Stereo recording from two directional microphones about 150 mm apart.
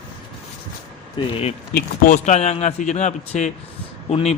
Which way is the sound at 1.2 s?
30° left (ahead or behind).